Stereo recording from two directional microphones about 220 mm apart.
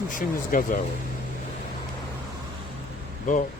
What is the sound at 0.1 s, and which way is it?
Speech, 40° left (ahead or behind).